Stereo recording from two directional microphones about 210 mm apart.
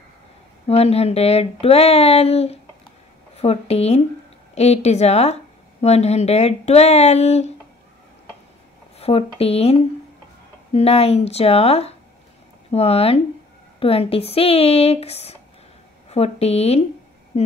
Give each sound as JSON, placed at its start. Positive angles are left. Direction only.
{"t": 0.7, "sound": "speech", "side_deg": 30}
{"t": 8.9, "sound": "speech", "side_deg": 30}